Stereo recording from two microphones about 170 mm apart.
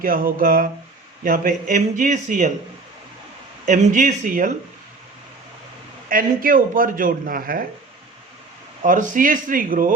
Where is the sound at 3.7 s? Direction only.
45° right (ahead or behind).